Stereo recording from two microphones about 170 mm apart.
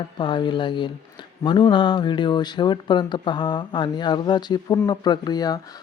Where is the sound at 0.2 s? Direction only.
30° left (ahead or behind).